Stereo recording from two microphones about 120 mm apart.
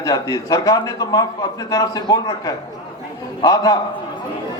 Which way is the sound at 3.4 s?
30° left (ahead or behind).